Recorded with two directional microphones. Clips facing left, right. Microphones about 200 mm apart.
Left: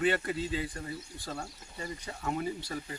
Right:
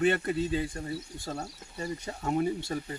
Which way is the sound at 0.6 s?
25° right (ahead or behind).